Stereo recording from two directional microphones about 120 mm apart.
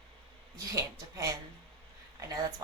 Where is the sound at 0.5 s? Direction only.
30° right (ahead or behind).